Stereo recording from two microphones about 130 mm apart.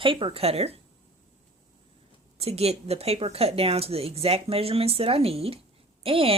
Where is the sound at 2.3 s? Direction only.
50° right (ahead or behind).